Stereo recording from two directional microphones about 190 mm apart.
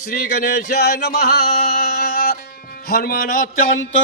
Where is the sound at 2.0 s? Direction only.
50° left (ahead or behind).